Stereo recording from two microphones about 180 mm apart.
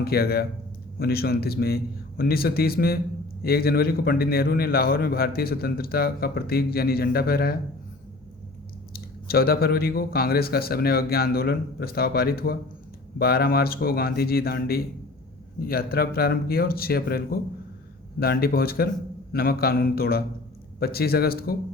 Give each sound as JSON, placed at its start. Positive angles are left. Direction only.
{"t": 0.0, "sound": "a man's voice", "side_deg": 60}
{"t": 8.9, "sound": "a man's voice", "side_deg": 55}